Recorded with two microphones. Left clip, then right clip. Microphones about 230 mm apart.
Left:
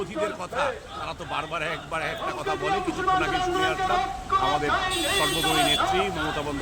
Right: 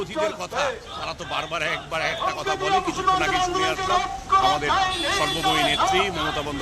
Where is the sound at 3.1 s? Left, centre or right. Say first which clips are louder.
Right 2 dB; right.